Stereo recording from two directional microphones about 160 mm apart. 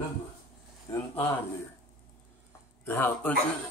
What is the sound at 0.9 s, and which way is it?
Speech, 20° left (ahead or behind).